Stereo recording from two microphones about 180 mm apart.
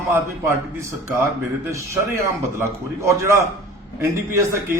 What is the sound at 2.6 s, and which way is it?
A man's voice, 15° right (ahead or behind).